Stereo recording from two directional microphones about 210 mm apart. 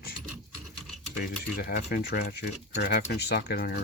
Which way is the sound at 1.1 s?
45° left (ahead or behind).